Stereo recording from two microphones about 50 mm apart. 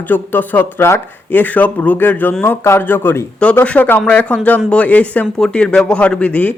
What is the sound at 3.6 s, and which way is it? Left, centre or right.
Speech, left.